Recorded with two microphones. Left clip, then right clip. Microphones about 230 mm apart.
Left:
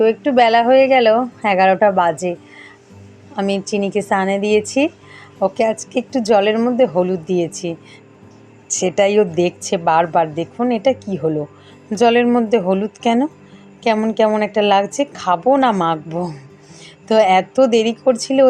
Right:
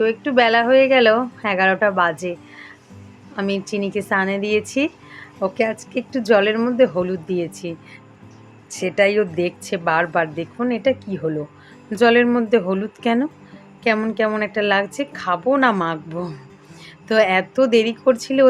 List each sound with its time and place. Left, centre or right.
0.0 s a woman's voice: centre